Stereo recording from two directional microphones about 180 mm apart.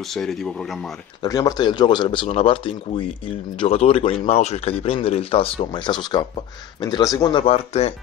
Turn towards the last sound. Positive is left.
turn(degrees=35)  # may be behind; listen again after turning